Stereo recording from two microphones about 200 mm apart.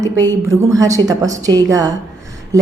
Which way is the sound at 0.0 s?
15° right (ahead or behind).